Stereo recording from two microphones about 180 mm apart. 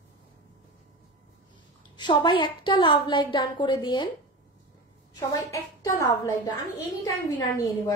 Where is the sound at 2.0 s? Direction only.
25° left (ahead or behind).